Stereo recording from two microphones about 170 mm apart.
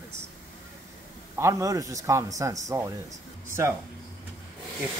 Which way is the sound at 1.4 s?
15° right (ahead or behind).